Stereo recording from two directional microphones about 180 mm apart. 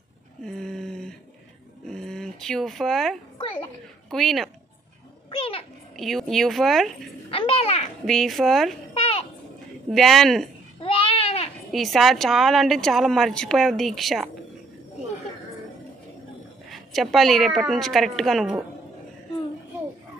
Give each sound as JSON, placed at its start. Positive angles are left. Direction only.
{"t": 0.5, "sound": "a sound", "side_deg": 0}
{"t": 1.9, "sound": "dog", "side_deg": 5}
{"t": 4.1, "sound": "a woman's voice", "side_deg": 0}
{"t": 5.3, "sound": "a sound", "side_deg": 30}
{"t": 5.9, "sound": "a woman's voice", "side_deg": 0}
{"t": 7.2, "sound": "babbling", "side_deg": 30}
{"t": 8.0, "sound": "a woman's voice", "side_deg": 0}
{"t": 8.9, "sound": "a sound", "side_deg": 35}
{"t": 9.8, "sound": "a woman's voice", "side_deg": 0}
{"t": 10.8, "sound": "babbling", "side_deg": 30}
{"t": 11.7, "sound": "a woman's voice", "side_deg": 0}
{"t": 16.7, "sound": "a woman's voice", "side_deg": 0}